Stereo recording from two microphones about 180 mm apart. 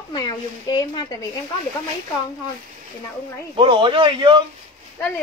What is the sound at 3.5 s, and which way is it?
Speech, 30° right (ahead or behind).